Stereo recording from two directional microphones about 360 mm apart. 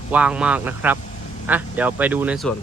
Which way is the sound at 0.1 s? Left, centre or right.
Centre.